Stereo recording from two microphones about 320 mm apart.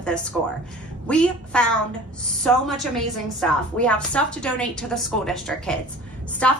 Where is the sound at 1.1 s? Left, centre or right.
Centre.